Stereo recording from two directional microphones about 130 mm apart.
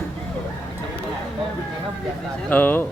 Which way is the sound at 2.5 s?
15° left (ahead or behind).